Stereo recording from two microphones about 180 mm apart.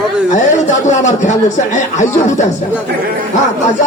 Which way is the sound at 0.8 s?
40° left (ahead or behind).